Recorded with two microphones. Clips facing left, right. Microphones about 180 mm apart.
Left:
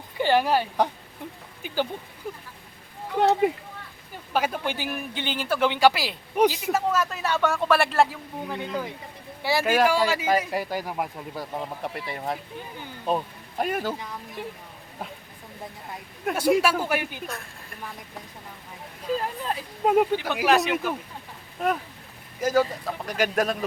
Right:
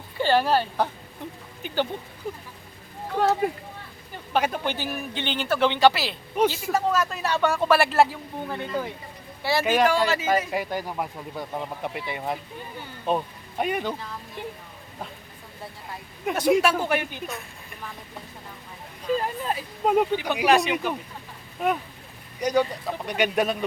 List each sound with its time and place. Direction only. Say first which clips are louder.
0.2 s speech: even; 15° left (ahead or behind)
3.2 s speech: left 2 dB; 20° left (ahead or behind)
4.3 s speech: right 1 dB; 5° left (ahead or behind)
6.7 s speech: right 1 dB; 5° left (ahead or behind)
8.5 s speech: right 1 dB; 15° left (ahead or behind)
16.2 s speech: right 1 dB; 5° left (ahead or behind)
19.1 s speech: right 2 dB; centre (ahead or behind)